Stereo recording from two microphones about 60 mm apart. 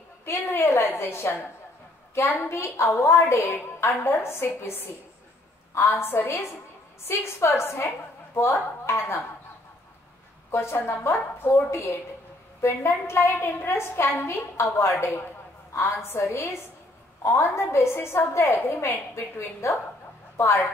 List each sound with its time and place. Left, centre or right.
0.5 s a woman's voice: left
5.9 s a woman's voice: left
10.5 s a woman's voice: left
18.5 s a woman's voice: left